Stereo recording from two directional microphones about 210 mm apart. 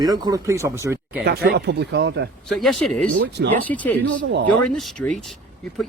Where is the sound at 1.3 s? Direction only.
50° right (ahead or behind).